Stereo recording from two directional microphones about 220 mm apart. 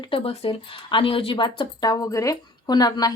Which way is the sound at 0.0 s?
25° left (ahead or behind).